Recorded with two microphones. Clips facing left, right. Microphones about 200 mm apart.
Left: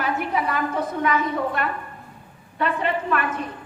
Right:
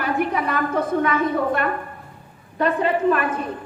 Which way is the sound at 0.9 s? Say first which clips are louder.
Right 2 dB; 50° right (ahead or behind).